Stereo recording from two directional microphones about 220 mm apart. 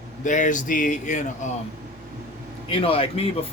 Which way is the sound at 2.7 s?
25° left (ahead or behind).